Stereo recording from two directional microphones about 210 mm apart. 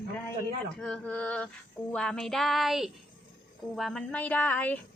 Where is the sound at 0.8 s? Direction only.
5° left (ahead or behind).